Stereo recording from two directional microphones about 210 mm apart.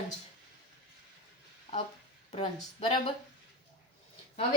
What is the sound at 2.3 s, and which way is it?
Speech, 30° left (ahead or behind).